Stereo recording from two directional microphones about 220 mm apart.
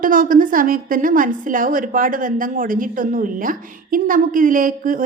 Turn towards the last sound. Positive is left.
turn(degrees=-40)  # may be behind; listen again after turning